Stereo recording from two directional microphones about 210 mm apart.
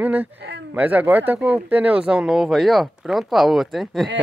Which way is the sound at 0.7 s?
5° right (ahead or behind).